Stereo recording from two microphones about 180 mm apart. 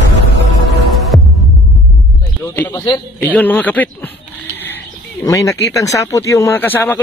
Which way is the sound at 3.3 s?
10° left (ahead or behind).